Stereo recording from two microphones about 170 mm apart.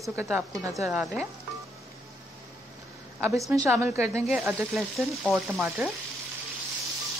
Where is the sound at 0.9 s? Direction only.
5° right (ahead or behind).